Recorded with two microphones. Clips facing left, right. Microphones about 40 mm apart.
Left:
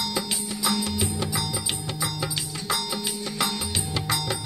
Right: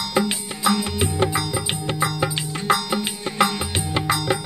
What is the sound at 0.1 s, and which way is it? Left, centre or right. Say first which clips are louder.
Music: right 7 dB; right.